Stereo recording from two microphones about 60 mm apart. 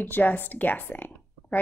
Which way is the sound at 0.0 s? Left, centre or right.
Left.